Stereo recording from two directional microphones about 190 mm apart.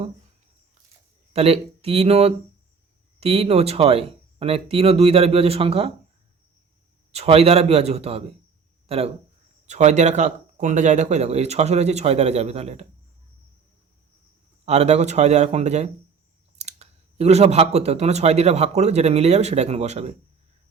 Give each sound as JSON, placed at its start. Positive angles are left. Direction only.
{"t": 1.3, "sound": "speech", "side_deg": -30}
{"t": 7.1, "sound": "speech", "side_deg": -35}
{"t": 9.6, "sound": "speech", "side_deg": -35}
{"t": 14.6, "sound": "speech", "side_deg": -35}